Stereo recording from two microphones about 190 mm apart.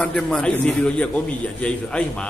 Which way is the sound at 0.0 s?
5° left (ahead or behind).